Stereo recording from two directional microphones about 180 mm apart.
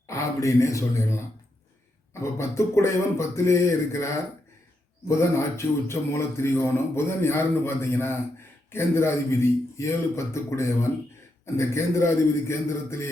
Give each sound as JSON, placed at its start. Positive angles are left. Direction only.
{"t": 0.1, "sound": "speech", "side_deg": 15}
{"t": 2.2, "sound": "speech", "side_deg": 15}